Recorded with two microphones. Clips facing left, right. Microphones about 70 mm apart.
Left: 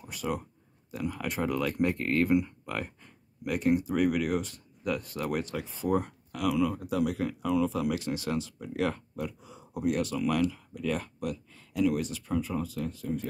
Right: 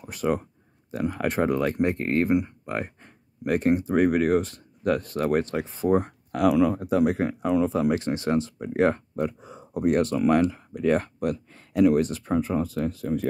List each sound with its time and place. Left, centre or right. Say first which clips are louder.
0.0 s speech: right 8 dB; right
3.0 s speech: right 7 dB; right